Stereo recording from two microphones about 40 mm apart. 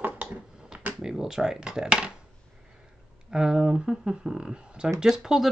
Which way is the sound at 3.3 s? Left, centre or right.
Centre.